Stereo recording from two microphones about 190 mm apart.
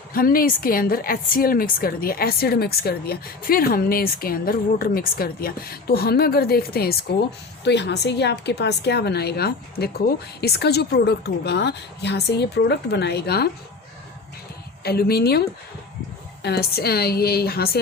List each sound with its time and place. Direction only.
0.1 s a woman's voice: 50° left (ahead or behind)
7.6 s a woman's voice: 65° left (ahead or behind)
14.8 s a woman's voice: 55° left (ahead or behind)